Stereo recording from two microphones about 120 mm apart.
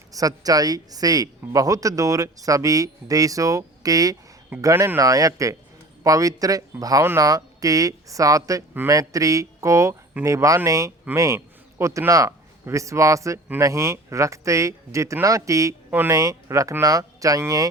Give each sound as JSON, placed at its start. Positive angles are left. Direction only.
{"t": 0.1, "sound": "a man's voice", "side_deg": -30}
{"t": 15.9, "sound": "speech", "side_deg": -15}